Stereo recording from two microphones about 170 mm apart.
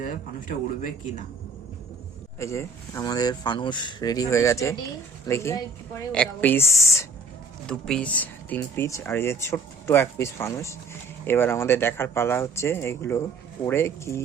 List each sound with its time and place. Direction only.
0.0 s speech: 50° left (ahead or behind)
2.4 s speech: 15° left (ahead or behind)
7.7 s speech: 5° left (ahead or behind)